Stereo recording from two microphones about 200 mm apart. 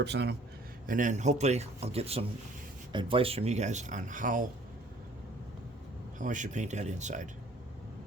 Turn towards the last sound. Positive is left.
turn(degrees=-40)  # may be behind; listen again after turning